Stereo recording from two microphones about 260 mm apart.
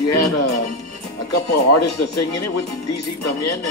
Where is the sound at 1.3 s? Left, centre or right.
Left.